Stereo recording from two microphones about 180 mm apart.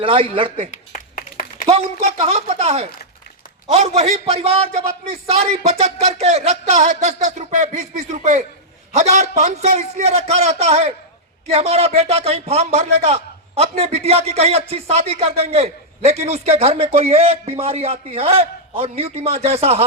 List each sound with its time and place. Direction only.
0.0 s a man's voice: 30° right (ahead or behind)
0.7 s a sound: 50° left (ahead or behind)
1.6 s a man's voice: 35° right (ahead or behind)